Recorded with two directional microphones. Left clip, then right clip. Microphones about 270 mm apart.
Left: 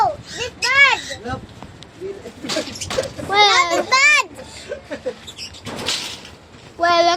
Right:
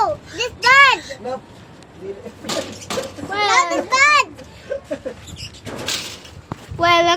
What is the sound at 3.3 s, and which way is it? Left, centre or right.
Speech, left.